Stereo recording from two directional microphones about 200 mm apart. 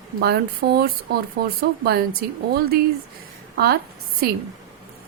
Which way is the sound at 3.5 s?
50° right (ahead or behind).